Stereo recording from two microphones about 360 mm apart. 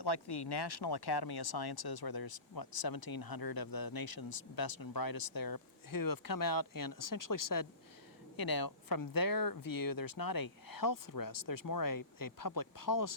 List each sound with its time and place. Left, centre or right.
0.0 s speech: left
8.4 s speech: left